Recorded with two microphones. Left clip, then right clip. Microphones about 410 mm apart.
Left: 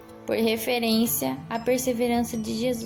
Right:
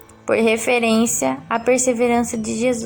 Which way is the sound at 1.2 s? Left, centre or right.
Left.